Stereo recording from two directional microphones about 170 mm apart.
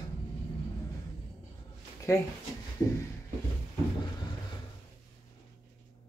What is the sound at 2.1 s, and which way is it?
Speech, 15° left (ahead or behind).